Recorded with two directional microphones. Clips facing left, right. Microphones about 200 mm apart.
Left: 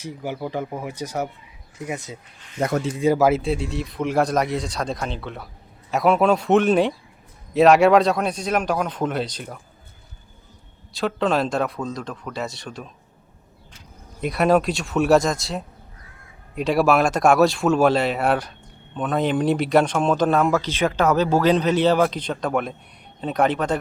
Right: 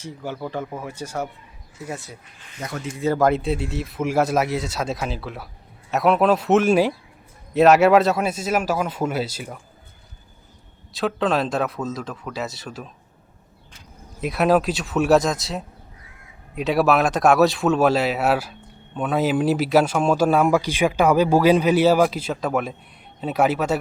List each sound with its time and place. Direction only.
0.0 s speech: 15° left (ahead or behind); by 9.6 s 5° right (ahead or behind)
10.9 s speech: centre (ahead or behind)
14.2 s speech: centre (ahead or behind)